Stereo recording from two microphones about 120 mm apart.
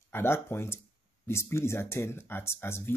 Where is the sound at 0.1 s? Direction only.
20° left (ahead or behind).